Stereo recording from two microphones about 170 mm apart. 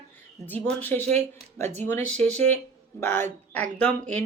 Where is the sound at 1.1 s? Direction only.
40° right (ahead or behind).